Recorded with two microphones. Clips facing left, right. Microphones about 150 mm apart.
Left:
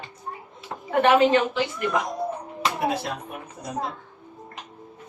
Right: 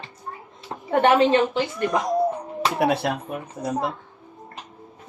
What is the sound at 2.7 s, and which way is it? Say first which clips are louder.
Speech: right 7 dB; 65° right (ahead or behind).